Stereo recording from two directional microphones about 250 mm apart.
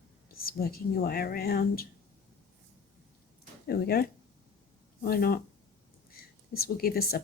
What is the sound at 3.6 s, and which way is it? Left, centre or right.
Speech, left.